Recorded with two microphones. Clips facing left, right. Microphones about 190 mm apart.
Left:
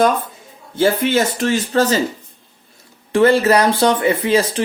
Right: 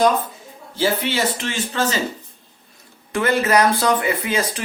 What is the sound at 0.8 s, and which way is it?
Speech, 50° left (ahead or behind).